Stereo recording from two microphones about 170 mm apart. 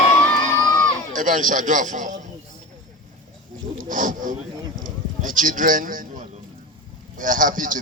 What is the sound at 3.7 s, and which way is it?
Wild animals, 50° right (ahead or behind).